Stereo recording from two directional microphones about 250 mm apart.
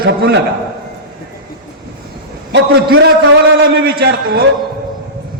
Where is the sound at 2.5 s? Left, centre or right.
Right.